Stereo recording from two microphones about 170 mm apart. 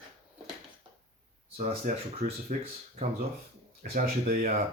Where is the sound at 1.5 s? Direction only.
40° right (ahead or behind).